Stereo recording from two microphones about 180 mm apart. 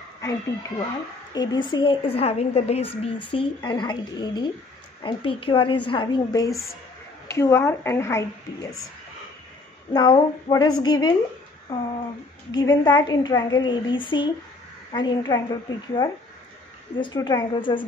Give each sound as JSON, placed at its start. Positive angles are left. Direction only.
{"t": 0.2, "sound": "a woman's voice", "side_deg": 15}
{"t": 9.9, "sound": "a woman's voice", "side_deg": 25}
{"t": 17.0, "sound": "a woman's voice", "side_deg": 25}